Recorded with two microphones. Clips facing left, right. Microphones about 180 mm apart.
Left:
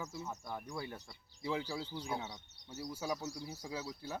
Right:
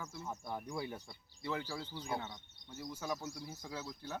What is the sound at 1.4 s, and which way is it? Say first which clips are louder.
Speech: left 2 dB; 10° left (ahead or behind).